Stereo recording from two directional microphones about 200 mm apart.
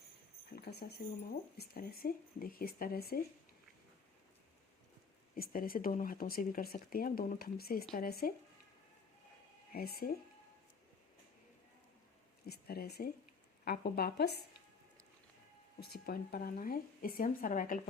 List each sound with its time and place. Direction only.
0.5 s speech: 50° left (ahead or behind)
5.4 s speech: 45° left (ahead or behind)
9.7 s speech: 50° left (ahead or behind)
12.5 s speech: 50° left (ahead or behind)
15.8 s speech: 50° left (ahead or behind)